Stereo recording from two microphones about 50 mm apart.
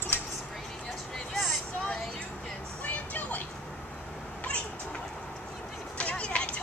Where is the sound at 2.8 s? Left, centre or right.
Left.